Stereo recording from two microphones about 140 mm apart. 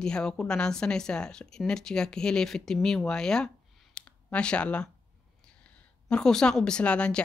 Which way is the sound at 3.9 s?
10° left (ahead or behind).